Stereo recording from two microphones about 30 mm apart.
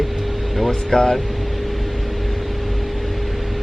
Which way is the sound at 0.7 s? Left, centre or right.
Centre.